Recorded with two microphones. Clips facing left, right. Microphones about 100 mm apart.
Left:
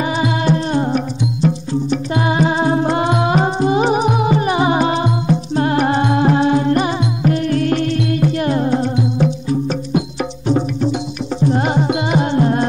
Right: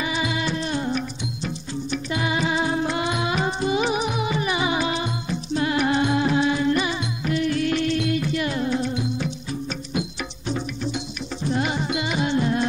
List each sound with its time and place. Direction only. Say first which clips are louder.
0.2 s music: left 8 dB; 45° left (ahead or behind)